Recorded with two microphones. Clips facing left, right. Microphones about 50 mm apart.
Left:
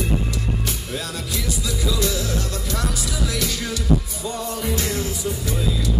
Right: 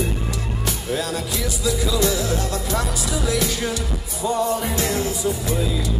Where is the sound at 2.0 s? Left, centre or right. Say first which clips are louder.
Right 3 dB; right.